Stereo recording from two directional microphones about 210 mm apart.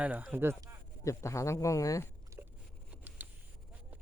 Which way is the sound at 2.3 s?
15° right (ahead or behind).